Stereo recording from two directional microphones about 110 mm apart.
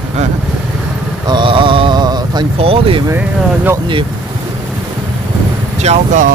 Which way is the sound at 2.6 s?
60° right (ahead or behind).